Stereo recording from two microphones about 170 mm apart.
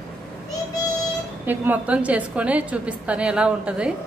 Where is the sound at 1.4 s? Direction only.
10° right (ahead or behind).